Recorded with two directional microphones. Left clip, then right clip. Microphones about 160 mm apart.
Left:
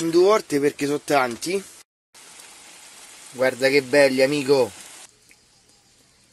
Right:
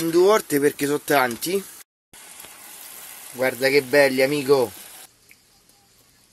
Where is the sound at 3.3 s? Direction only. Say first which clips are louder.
Left 1 dB; centre (ahead or behind).